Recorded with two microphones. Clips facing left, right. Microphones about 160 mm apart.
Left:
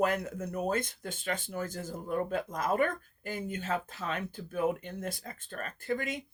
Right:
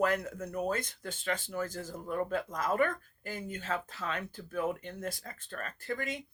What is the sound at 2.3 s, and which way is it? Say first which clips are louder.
Speech: left 1 dB; 45° left (ahead or behind).